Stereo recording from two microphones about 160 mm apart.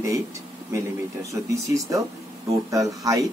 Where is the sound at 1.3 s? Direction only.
20° right (ahead or behind).